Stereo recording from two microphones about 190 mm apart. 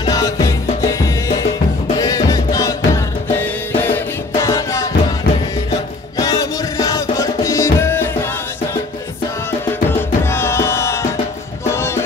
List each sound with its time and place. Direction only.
0.0 s music: 20° left (ahead or behind)
6.1 s music: 20° left (ahead or behind)
9.8 s music: 10° left (ahead or behind)